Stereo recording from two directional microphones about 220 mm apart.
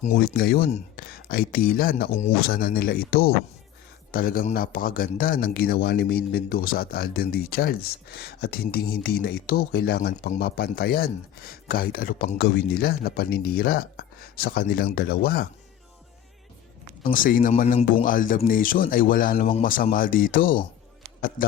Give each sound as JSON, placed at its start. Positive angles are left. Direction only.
{"t": 0.0, "sound": "a man's voice", "side_deg": 45}
{"t": 17.0, "sound": "speech", "side_deg": 40}